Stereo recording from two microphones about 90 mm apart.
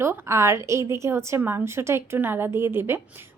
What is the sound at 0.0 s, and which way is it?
Speech, 30° right (ahead or behind).